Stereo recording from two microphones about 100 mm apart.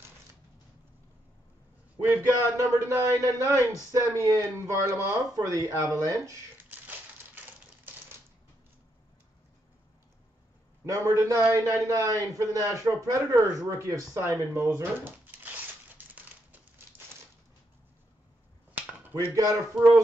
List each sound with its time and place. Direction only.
2.0 s a man's voice: 30° right (ahead or behind)
10.9 s a man's voice: 35° right (ahead or behind); by 15.6 s 20° right (ahead or behind)
16.1 s typewriter: 20° right (ahead or behind)
18.8 s a sound: 15° right (ahead or behind)
19.3 s a man's voice: 35° right (ahead or behind)